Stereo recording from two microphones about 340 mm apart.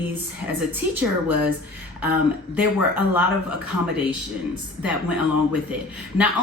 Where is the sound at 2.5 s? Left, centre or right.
Centre.